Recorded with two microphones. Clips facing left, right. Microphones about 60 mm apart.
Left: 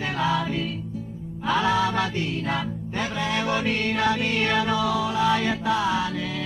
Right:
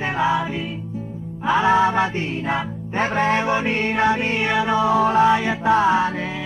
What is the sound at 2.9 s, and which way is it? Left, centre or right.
Music, right.